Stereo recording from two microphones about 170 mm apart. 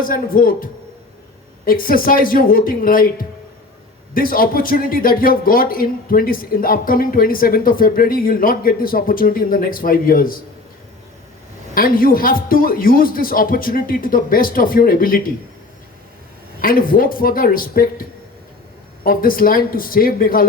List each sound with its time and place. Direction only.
0.0 s speech: 55° left (ahead or behind)
11.7 s speech: 55° left (ahead or behind)
16.6 s speech: 55° left (ahead or behind)
19.0 s speech: 55° left (ahead or behind)